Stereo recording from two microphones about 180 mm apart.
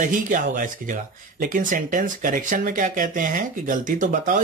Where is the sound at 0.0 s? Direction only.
45° right (ahead or behind).